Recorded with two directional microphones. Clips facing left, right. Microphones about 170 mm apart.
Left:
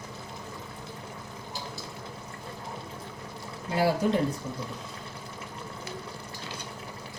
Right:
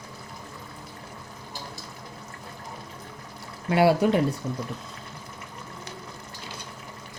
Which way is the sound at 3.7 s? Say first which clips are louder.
Right 5 dB; 70° right (ahead or behind).